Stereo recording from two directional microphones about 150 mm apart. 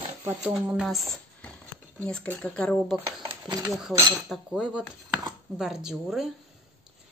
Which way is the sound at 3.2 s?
30° right (ahead or behind).